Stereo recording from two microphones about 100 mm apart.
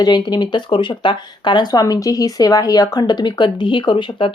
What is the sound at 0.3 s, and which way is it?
Speech, 45° left (ahead or behind).